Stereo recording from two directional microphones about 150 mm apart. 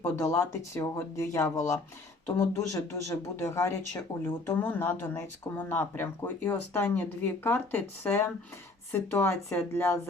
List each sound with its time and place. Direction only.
0.0 s speech: 20° left (ahead or behind)